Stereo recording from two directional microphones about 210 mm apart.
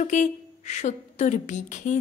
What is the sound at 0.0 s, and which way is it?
A woman's voice, 35° left (ahead or behind).